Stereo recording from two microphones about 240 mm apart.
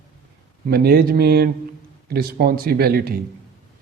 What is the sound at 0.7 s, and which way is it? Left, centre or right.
A man's voice, right.